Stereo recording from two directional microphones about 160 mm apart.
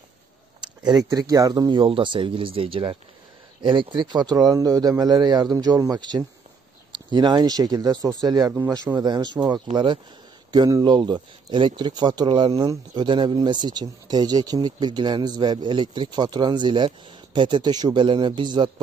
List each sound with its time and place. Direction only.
1.1 s speech: 20° right (ahead or behind)